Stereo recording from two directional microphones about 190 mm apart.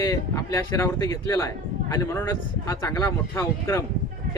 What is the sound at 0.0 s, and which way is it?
Speech, 15° left (ahead or behind).